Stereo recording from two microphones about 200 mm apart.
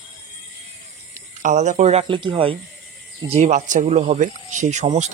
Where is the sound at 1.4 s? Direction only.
35° right (ahead or behind).